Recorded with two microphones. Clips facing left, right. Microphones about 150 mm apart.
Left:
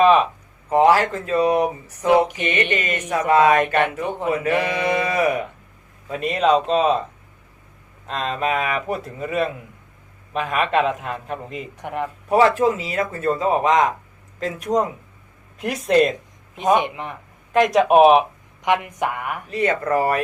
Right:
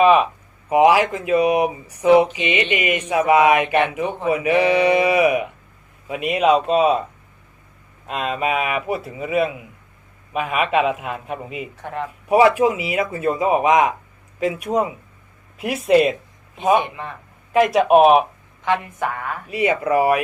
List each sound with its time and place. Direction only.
0.0 s speech: 5° right (ahead or behind)
11.8 s a woman's voice: 15° left (ahead or behind)
12.3 s speech: 10° right (ahead or behind)
16.7 s a woman's voice: 20° left (ahead or behind)
17.5 s speech: 5° right (ahead or behind)
18.6 s a woman's voice: 15° left (ahead or behind)
19.5 s speech: 10° right (ahead or behind)